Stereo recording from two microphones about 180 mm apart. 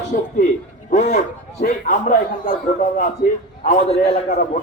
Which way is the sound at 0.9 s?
45° left (ahead or behind).